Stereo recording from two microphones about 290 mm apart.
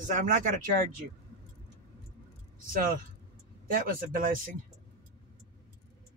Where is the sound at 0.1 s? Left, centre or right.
Right.